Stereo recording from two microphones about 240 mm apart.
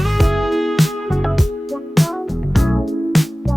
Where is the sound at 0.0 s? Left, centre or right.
Centre.